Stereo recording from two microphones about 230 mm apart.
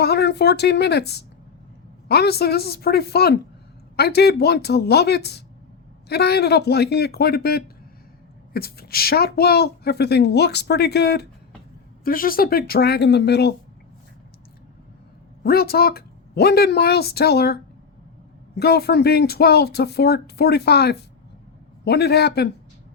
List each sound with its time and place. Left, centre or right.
0.0 s a woman's voice: left
15.4 s a woman's voice: left
18.6 s a woman's voice: left